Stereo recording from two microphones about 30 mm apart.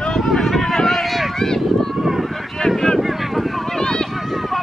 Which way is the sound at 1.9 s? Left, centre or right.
Centre.